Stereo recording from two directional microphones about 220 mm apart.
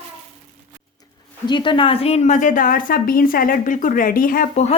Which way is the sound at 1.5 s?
20° left (ahead or behind).